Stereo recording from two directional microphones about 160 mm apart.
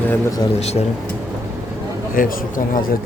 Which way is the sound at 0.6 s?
45° left (ahead or behind).